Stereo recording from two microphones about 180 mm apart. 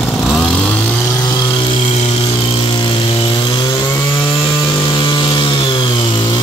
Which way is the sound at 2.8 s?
25° left (ahead or behind).